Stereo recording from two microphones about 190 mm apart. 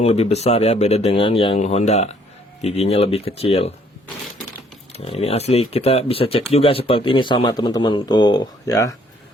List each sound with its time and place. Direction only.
0.0 s speech: 35° left (ahead or behind)
4.9 s speech: 30° left (ahead or behind)